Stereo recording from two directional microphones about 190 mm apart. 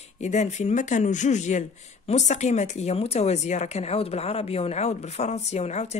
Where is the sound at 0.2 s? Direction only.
35° left (ahead or behind).